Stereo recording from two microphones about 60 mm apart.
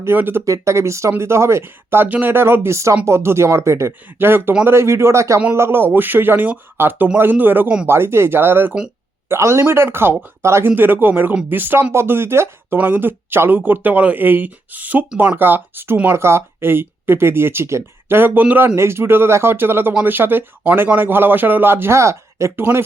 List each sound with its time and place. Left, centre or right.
0.0 s speech: right
0.4 s speech: right
2.0 s speech: right
2.3 s speech: right
4.2 s speech: right
5.5 s speech: right
9.3 s speech: right
10.8 s speech: right
12.7 s speech: right
18.2 s speech: right
18.8 s speech: right